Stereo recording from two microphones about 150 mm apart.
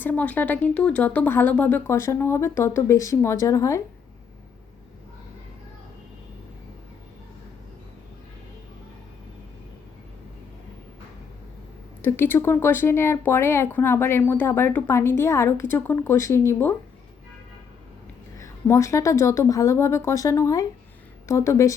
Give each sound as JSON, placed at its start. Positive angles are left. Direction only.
{"t": 0.0, "sound": "speech", "side_deg": 10}
{"t": 12.0, "sound": "speech", "side_deg": 15}
{"t": 18.4, "sound": "a woman's voice", "side_deg": 20}